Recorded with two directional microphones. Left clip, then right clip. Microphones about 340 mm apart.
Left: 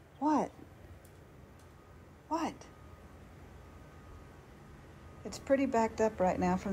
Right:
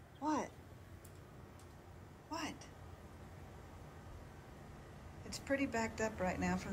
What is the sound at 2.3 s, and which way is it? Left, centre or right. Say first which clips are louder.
Speech: left 9 dB; centre.